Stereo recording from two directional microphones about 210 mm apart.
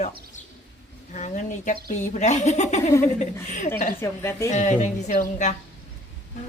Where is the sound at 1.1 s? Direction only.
35° left (ahead or behind).